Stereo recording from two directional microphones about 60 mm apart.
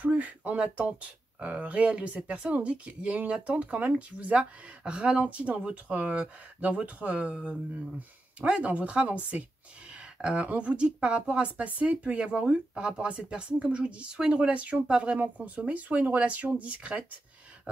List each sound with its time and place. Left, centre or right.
0.0 s speech: right